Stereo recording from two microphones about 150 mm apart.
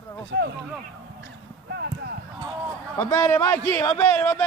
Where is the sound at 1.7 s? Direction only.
90° right.